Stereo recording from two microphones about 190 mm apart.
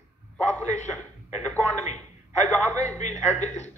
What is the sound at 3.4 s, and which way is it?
Speech, 35° left (ahead or behind).